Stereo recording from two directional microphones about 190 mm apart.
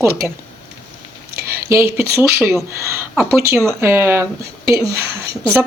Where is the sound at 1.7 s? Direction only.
15° right (ahead or behind).